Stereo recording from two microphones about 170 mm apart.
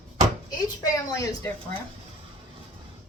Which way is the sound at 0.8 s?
20° left (ahead or behind).